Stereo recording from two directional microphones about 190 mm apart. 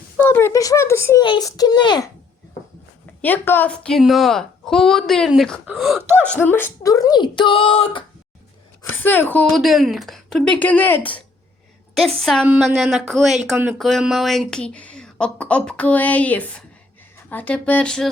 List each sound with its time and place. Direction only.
0.2 s speech: 10° left (ahead or behind)
3.2 s speech: 10° left (ahead or behind)
6.0 s speech: 10° right (ahead or behind)
6.2 s speech: 10° left (ahead or behind); by 8.0 s 30° left (ahead or behind)
8.8 s speech: 10° left (ahead or behind)